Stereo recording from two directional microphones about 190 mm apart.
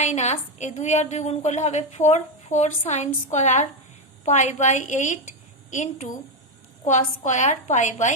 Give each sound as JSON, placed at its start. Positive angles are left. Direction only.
{"t": 0.0, "sound": "a woman's voice", "side_deg": 35}
{"t": 7.3, "sound": "a woman's voice", "side_deg": 40}